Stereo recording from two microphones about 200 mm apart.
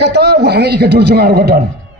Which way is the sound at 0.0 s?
55° right (ahead or behind).